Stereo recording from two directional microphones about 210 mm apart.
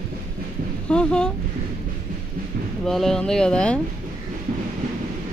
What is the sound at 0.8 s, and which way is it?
Speech, 5° left (ahead or behind).